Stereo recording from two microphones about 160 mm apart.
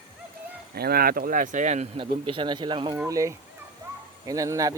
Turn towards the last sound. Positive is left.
turn(degrees=-20)  # may be behind; listen again after turning